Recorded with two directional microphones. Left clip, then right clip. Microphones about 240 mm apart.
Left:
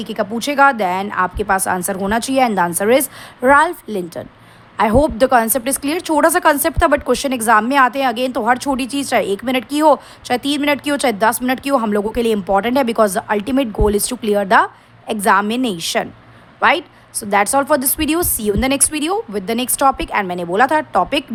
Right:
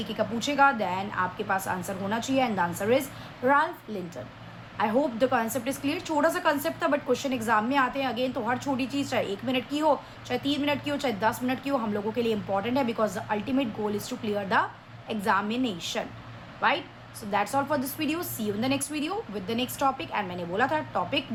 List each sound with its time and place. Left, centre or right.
0.0 s a woman's voice: left